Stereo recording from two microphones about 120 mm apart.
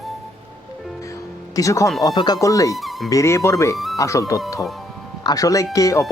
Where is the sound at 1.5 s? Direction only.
25° left (ahead or behind).